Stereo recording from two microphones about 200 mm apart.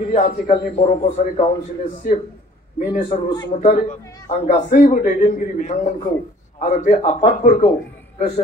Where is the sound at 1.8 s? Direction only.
40° left (ahead or behind).